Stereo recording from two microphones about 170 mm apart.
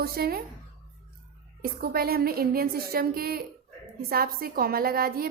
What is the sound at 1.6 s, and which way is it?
A woman's voice, 60° right (ahead or behind).